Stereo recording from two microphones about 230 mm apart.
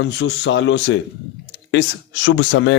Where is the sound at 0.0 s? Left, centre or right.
Left.